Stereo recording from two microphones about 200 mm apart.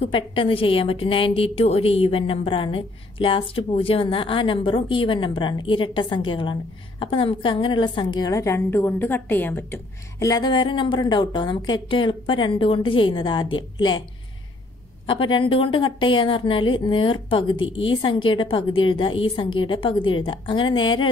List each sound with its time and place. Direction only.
0.0 s a woman's voice: 25° left (ahead or behind)
15.0 s a woman's voice: 25° left (ahead or behind)